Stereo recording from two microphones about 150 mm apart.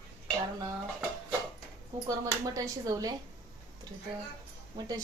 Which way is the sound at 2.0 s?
20° right (ahead or behind).